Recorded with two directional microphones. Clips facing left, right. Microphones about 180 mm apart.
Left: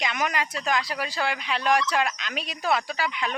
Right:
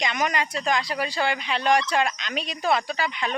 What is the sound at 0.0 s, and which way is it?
Speech, 5° left (ahead or behind).